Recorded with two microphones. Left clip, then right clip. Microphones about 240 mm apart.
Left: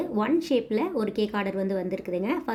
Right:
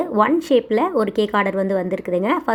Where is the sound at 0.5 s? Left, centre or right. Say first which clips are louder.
Right 9 dB; centre.